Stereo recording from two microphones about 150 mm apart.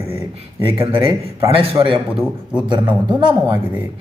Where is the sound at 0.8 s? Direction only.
15° right (ahead or behind).